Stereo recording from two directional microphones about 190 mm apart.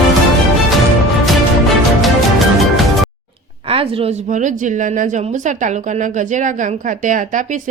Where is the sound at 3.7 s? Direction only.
30° right (ahead or behind).